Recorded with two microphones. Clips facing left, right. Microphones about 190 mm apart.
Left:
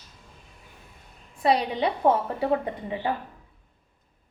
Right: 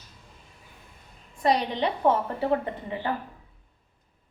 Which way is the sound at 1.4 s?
10° left (ahead or behind).